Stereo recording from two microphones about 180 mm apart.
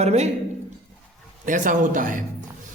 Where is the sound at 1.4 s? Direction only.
45° right (ahead or behind).